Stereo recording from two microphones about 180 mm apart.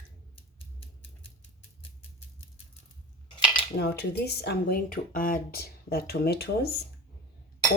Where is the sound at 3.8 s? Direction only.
65° left (ahead or behind).